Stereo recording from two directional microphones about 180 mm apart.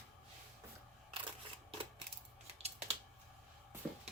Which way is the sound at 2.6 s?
35° right (ahead or behind).